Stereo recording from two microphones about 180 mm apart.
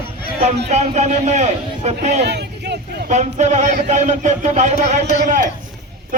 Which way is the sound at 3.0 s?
40° right (ahead or behind).